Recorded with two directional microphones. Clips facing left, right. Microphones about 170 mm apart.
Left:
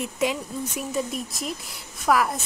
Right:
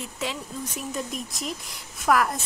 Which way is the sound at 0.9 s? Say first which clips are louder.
Left 5 dB; centre (ahead or behind).